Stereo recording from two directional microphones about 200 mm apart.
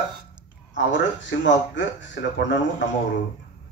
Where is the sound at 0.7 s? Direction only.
65° left (ahead or behind).